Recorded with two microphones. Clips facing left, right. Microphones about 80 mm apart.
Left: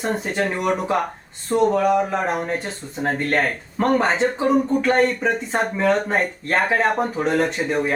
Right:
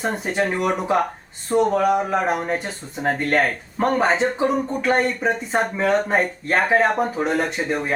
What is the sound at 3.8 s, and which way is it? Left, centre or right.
Speech, centre.